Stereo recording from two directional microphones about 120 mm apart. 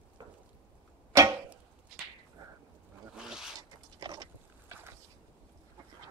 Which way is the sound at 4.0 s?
35° right (ahead or behind).